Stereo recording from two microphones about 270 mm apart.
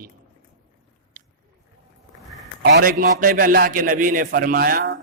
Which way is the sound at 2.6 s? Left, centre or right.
Right.